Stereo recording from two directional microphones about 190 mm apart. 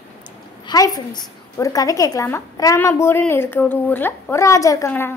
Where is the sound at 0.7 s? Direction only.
20° left (ahead or behind).